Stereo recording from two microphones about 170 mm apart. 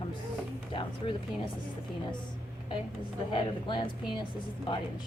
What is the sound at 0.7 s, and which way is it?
Speech, 30° left (ahead or behind).